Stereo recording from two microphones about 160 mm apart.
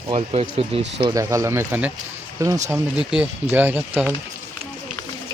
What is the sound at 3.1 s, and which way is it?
Speech, 10° right (ahead or behind).